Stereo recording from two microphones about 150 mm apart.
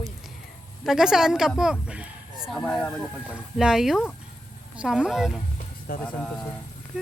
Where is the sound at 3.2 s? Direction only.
5° right (ahead or behind).